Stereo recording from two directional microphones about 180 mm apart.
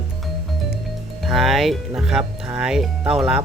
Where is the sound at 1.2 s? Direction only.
Centre (ahead or behind).